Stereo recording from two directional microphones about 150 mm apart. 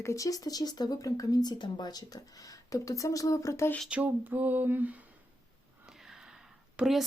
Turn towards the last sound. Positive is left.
turn(degrees=0)  # may be behind; listen again after turning